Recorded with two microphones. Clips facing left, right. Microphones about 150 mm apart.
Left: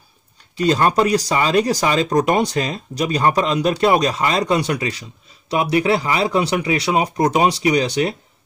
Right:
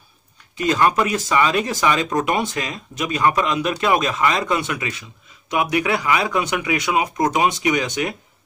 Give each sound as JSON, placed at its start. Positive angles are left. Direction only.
{"t": 0.6, "sound": "speech", "side_deg": 35}